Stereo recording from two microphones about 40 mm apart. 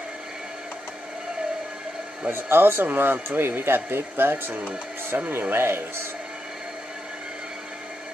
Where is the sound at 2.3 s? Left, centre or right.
Right.